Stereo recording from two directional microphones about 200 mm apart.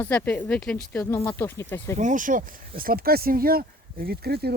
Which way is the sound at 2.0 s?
40° right (ahead or behind).